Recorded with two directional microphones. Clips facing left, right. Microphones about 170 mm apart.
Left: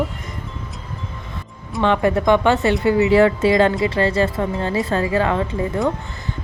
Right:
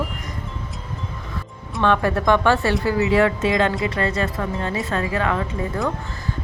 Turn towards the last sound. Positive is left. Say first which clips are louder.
# left 3 dB
turn(degrees=30)  # may be behind; listen again after turning